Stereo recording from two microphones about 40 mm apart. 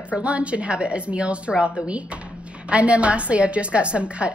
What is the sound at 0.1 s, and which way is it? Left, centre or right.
A woman's voice, right.